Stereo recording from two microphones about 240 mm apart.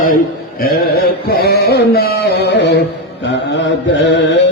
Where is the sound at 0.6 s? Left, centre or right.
Left.